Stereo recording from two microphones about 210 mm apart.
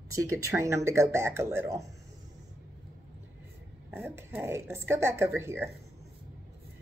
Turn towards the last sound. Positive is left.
turn(degrees=-10)  # may be behind; listen again after turning